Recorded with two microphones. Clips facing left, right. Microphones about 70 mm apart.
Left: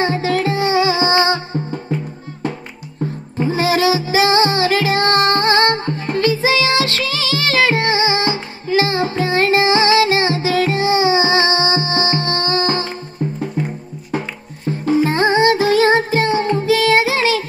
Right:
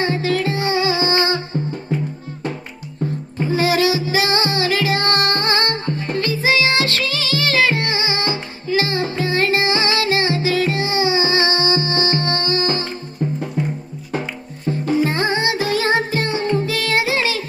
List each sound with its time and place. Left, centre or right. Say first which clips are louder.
0.0 s music: left 2 dB; left
3.3 s music: left 1 dB; left
14.7 s music: left 2 dB; left